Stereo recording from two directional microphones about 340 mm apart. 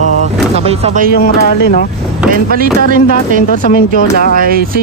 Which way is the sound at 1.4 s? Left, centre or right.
Left.